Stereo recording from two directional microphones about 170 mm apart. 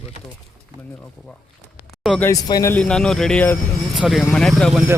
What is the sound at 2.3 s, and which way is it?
Speech, 20° left (ahead or behind).